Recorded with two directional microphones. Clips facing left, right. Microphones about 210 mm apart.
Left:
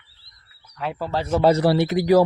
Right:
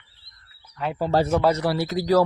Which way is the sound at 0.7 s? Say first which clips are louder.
Even; centre (ahead or behind).